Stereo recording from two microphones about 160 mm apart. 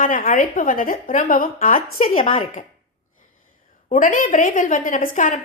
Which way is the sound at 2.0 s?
35° left (ahead or behind).